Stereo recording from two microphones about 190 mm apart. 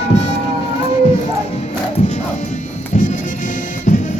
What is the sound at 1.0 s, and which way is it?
Music, 35° left (ahead or behind).